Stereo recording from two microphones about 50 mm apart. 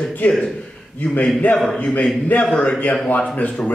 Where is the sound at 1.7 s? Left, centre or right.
Left.